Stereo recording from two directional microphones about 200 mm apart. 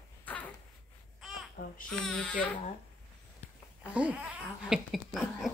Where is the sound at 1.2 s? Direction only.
Centre (ahead or behind).